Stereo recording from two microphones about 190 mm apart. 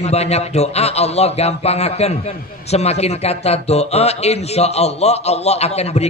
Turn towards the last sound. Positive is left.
turn(degrees=35)  # may be behind; listen again after turning